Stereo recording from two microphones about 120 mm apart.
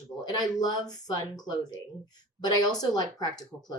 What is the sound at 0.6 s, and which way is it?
A woman's voice, 35° left (ahead or behind).